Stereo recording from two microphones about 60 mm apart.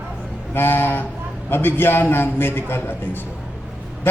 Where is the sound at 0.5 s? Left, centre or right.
Left.